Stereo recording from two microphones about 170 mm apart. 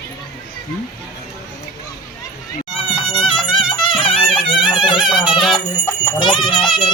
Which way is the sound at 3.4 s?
30° left (ahead or behind).